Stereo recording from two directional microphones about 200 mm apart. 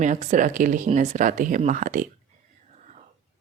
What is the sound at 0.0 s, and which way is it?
Speech, 35° right (ahead or behind).